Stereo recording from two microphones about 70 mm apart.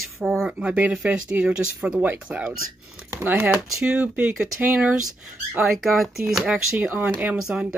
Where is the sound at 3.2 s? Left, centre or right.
Right.